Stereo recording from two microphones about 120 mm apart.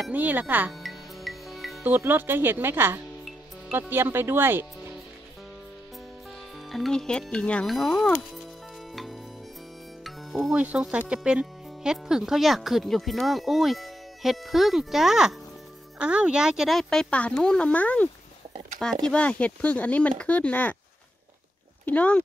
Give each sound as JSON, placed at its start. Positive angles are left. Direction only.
{"t": 0.1, "sound": "speech", "side_deg": -15}
{"t": 0.7, "sound": "music", "side_deg": 0}
{"t": 1.9, "sound": "speech", "side_deg": -15}
{"t": 6.7, "sound": "speech", "side_deg": 5}
{"t": 8.9, "sound": "music", "side_deg": 0}
{"t": 10.5, "sound": "speech", "side_deg": -10}
{"t": 19.0, "sound": "speech", "side_deg": 10}
{"t": 21.8, "sound": "speech", "side_deg": 10}